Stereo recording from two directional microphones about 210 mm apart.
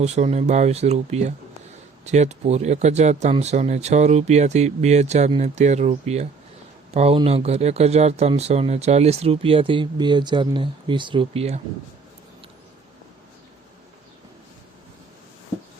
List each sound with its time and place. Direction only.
0.0 s speech: 30° right (ahead or behind)